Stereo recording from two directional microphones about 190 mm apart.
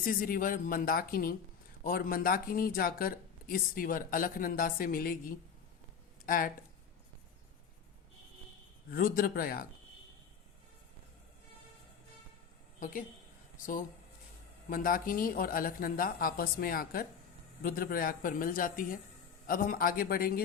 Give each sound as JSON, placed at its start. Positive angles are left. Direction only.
{"t": 0.0, "sound": "speech", "side_deg": 50}
{"t": 8.9, "sound": "speech", "side_deg": 50}
{"t": 12.8, "sound": "speech", "side_deg": 45}
{"t": 14.7, "sound": "speech", "side_deg": 45}